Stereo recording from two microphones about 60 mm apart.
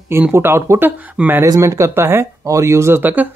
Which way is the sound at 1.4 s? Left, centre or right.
Right.